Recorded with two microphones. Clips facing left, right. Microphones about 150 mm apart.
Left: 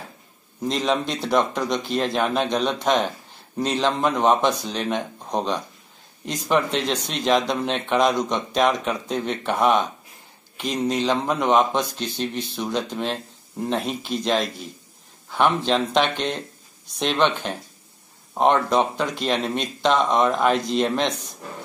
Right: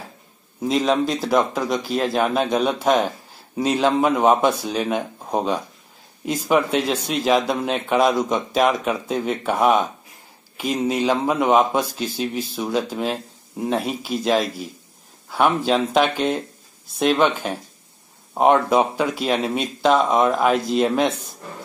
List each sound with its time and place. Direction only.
0.6 s speech: 5° right (ahead or behind)